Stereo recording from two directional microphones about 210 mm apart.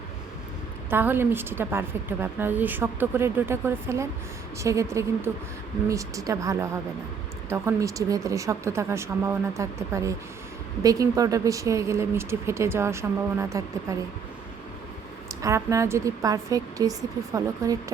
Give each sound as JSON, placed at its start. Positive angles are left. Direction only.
{"t": 0.9, "sound": "a woman's voice", "side_deg": -10}
{"t": 15.4, "sound": "a woman's voice", "side_deg": -15}